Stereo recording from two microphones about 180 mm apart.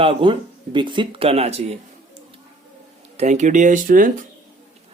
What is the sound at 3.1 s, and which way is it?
Speech, 40° right (ahead or behind).